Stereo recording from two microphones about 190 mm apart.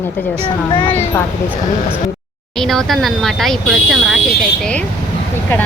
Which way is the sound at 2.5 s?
Centre (ahead or behind).